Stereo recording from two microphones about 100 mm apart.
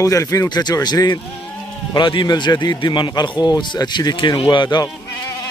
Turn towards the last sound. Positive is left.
turn(degrees=45)  # may be behind; listen again after turning